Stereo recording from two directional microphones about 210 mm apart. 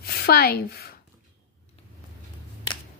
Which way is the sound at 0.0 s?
50° left (ahead or behind).